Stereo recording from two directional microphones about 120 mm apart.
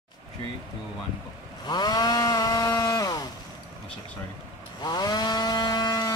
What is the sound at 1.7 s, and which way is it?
Chainsaw, 35° left (ahead or behind).